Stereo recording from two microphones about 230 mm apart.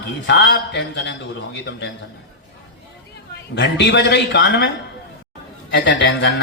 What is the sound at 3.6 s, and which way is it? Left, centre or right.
Speech, left.